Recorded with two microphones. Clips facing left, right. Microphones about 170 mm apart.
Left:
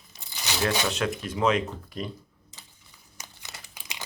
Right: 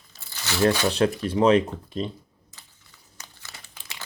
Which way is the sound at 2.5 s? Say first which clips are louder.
Left 1 dB; 20° left (ahead or behind).